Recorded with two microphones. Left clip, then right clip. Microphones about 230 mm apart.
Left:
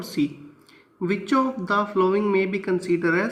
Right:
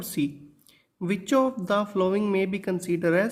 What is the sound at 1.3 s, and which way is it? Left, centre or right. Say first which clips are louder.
A man's voice: even; right.